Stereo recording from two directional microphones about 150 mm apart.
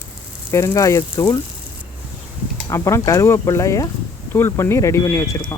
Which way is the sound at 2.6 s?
20° left (ahead or behind).